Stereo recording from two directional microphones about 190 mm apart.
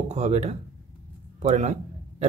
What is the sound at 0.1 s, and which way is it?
A man's voice, 35° right (ahead or behind).